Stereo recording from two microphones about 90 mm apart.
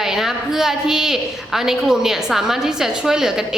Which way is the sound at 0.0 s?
5° right (ahead or behind).